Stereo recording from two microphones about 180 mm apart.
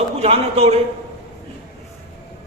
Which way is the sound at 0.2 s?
35° right (ahead or behind).